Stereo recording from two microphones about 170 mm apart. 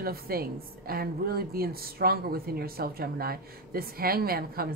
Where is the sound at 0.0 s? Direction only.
65° right (ahead or behind).